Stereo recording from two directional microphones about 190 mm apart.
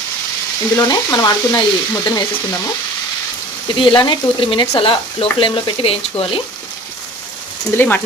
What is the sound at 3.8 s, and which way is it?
Speech, 25° left (ahead or behind).